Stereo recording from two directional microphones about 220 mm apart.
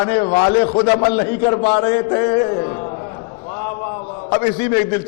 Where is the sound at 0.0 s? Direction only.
20° left (ahead or behind).